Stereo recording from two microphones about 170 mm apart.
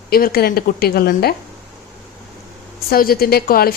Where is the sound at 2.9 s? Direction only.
60° left (ahead or behind).